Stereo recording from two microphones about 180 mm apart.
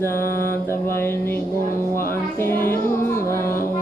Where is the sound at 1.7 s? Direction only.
55° left (ahead or behind).